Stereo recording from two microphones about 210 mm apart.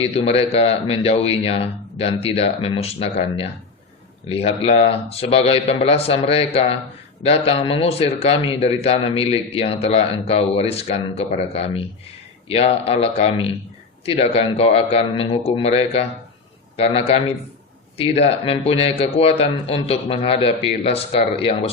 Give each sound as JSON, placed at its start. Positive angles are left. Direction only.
{"t": 0.0, "sound": "speech", "side_deg": 30}